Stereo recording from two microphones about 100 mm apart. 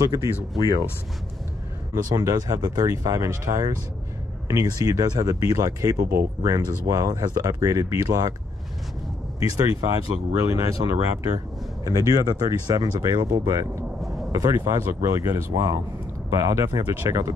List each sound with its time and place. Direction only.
0.0 s speech: 35° right (ahead or behind)
2.0 s speech: 35° right (ahead or behind)
10.3 s speech: 35° right (ahead or behind)